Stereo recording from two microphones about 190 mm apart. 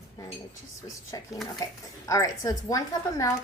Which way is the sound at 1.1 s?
20° left (ahead or behind).